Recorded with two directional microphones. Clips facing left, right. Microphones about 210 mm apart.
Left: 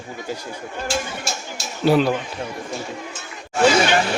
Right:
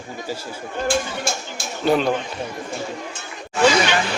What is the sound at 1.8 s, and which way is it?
Speech, 5° left (ahead or behind).